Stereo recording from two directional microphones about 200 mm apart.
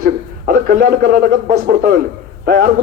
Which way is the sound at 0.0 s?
50° right (ahead or behind).